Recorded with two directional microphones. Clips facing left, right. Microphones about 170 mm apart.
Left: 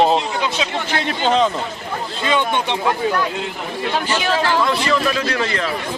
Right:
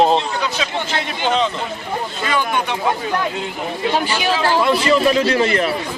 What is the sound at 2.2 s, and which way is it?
Speech, 25° left (ahead or behind).